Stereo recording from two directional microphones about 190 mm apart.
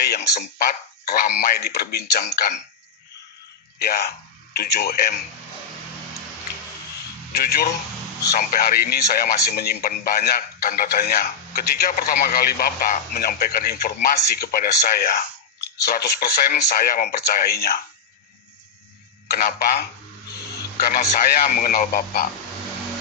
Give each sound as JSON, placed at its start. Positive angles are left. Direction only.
{"t": 0.0, "sound": "speech", "side_deg": 55}
{"t": 3.8, "sound": "speech", "side_deg": 55}
{"t": 7.3, "sound": "speech", "side_deg": 55}
{"t": 19.4, "sound": "speech", "side_deg": 45}